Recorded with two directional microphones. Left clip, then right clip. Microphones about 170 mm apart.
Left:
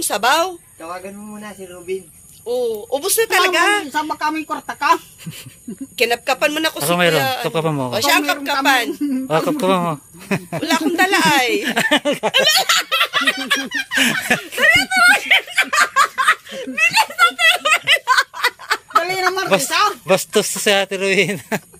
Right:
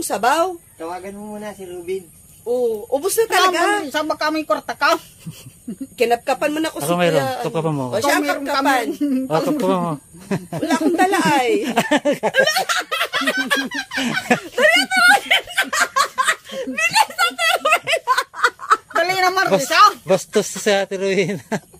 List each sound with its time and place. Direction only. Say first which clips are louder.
0.1 s speech: left 1 dB; 45° right (ahead or behind)
2.6 s speech: right 1 dB; 50° right (ahead or behind)
3.9 s a woman's voice: even; 15° right (ahead or behind)
5.9 s speech: left 1 dB; 45° right (ahead or behind)
6.8 s a man's voice: left 1 dB; 10° left (ahead or behind)
7.9 s speech: left 2 dB; 45° right (ahead or behind)
9.3 s speech: left 3 dB; 5° left (ahead or behind)
11.0 s speech: left 3 dB; 45° right (ahead or behind)
11.6 s a woman's voice: left 1 dB; 10° right (ahead or behind)
12.4 s speech: left 4 dB; 50° right (ahead or behind)
13.9 s speech: left 3 dB; 5° right (ahead or behind)
14.5 s snicker: left 1 dB; 25° right (ahead or behind); by 18.5 s 55° right (ahead or behind)
19.0 s speech: right 1 dB; 10° right (ahead or behind)